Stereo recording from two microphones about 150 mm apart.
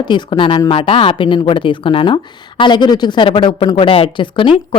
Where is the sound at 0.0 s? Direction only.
30° left (ahead or behind).